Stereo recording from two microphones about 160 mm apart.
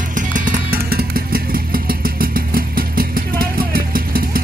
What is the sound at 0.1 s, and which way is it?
Music, 55° right (ahead or behind).